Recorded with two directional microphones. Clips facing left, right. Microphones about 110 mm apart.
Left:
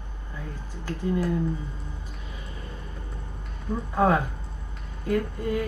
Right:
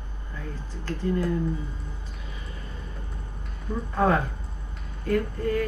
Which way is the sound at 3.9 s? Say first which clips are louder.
Left 1 dB; 15° left (ahead or behind).